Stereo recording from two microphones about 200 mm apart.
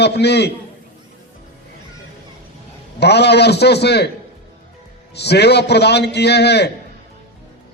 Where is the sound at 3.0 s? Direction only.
55° left (ahead or behind).